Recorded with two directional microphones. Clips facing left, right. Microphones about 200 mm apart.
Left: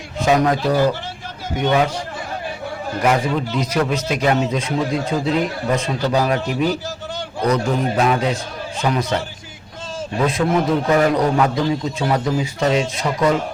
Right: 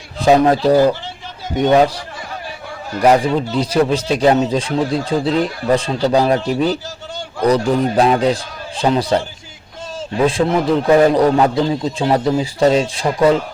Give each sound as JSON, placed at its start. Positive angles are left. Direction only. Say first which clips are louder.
{"t": 0.2, "sound": "speech", "louder": "right 5 dB", "side_deg": -35}
{"t": 3.0, "sound": "speech", "louder": "right 6 dB", "side_deg": -35}
{"t": 10.2, "sound": "speech", "louder": "right 3 dB", "side_deg": -30}